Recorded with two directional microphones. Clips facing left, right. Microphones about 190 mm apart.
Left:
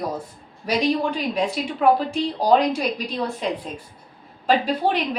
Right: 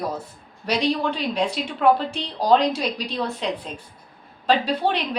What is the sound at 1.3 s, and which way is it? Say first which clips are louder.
A woman's voice: left 1 dB; 5° left (ahead or behind).